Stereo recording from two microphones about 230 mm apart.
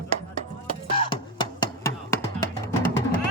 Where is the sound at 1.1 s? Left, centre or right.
Centre.